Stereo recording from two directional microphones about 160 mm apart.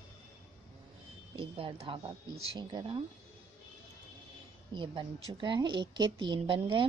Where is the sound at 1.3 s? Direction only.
35° right (ahead or behind).